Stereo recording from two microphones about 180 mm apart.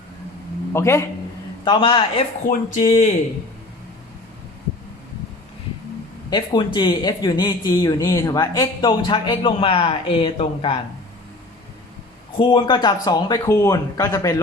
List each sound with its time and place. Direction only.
0.7 s a man's voice: 15° left (ahead or behind)
1.6 s speech: 30° left (ahead or behind)
2.5 s speech: 45° left (ahead or behind)
6.3 s speech: 25° left (ahead or behind)
12.4 s speech: 25° left (ahead or behind)